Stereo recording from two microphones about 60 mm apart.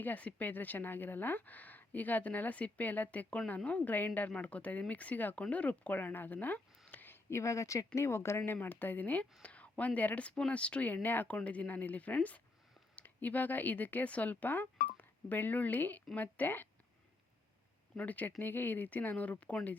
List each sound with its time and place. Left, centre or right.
0.0 s speech: left
7.3 s speech: left
7.9 s speech: left
8.6 s speech: left
17.9 s speech: left